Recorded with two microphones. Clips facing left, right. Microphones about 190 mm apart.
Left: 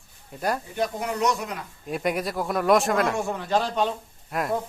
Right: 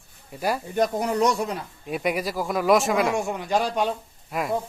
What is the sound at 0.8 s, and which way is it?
Speech, 40° right (ahead or behind).